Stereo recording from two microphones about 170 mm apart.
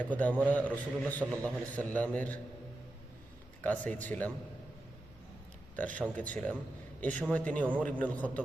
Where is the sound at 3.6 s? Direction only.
10° left (ahead or behind).